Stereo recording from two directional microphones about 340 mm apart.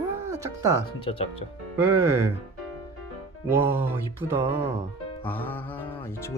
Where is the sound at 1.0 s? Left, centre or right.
Centre.